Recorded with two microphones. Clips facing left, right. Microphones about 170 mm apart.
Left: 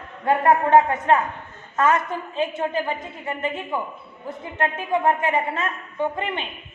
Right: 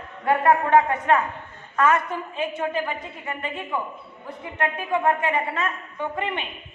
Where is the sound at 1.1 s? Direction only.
30° left (ahead or behind).